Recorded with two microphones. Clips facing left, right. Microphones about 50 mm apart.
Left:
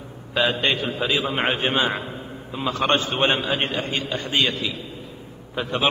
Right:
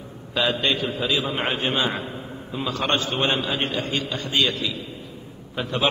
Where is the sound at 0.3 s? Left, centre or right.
Centre.